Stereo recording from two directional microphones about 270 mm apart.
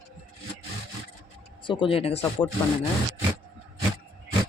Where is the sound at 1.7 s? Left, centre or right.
Centre.